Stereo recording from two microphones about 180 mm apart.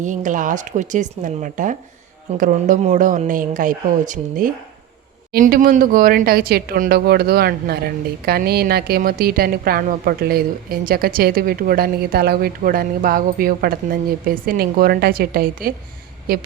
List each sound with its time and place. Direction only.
0.0 s speech: 45° right (ahead or behind)